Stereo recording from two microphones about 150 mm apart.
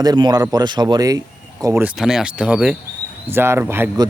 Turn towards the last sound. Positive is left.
turn(degrees=-15)  # may be behind; listen again after turning